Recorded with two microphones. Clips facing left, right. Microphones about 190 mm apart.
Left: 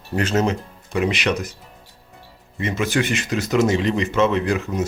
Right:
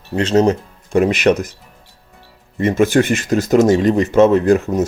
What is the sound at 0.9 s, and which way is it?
Speech, 45° right (ahead or behind).